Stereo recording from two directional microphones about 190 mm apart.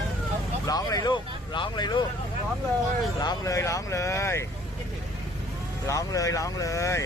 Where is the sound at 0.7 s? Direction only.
20° left (ahead or behind).